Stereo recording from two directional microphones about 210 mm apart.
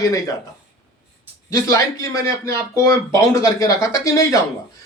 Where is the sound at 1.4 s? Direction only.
15° left (ahead or behind).